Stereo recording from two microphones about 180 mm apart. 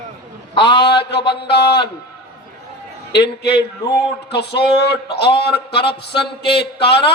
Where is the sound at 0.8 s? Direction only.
65° left (ahead or behind).